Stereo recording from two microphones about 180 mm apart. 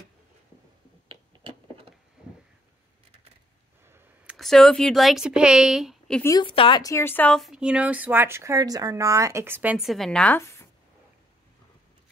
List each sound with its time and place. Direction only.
1.0 s a sound: 30° right (ahead or behind)
4.4 s speech: centre (ahead or behind)
6.2 s speech: 25° left (ahead or behind)
6.8 s speech: 15° left (ahead or behind)